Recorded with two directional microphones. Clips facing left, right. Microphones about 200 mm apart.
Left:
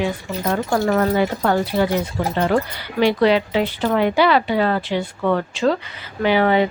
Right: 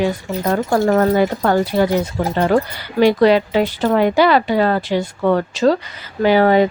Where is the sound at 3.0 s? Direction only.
45° right (ahead or behind).